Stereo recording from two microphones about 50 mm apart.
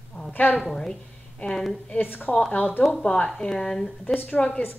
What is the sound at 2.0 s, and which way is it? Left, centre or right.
Speech, left.